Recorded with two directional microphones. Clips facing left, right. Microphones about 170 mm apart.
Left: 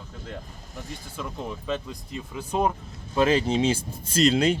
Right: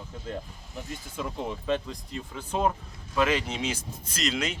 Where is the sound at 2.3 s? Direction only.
15° left (ahead or behind).